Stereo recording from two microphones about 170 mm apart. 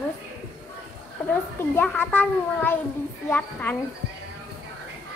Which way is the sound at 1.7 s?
10° left (ahead or behind).